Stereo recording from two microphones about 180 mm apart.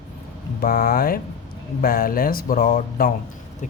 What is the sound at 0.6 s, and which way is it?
A man's voice, 50° left (ahead or behind).